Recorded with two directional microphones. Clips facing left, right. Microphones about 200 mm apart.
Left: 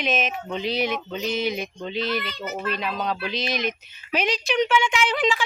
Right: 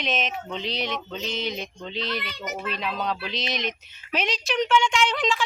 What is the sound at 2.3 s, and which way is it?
Speech, 15° right (ahead or behind).